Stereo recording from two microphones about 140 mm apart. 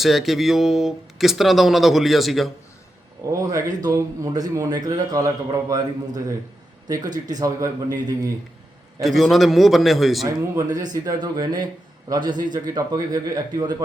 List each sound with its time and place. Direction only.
0.0 s speech: centre (ahead or behind)
3.4 s a man's voice: 25° right (ahead or behind)
9.0 s speech: centre (ahead or behind)
10.2 s a man's voice: 25° right (ahead or behind)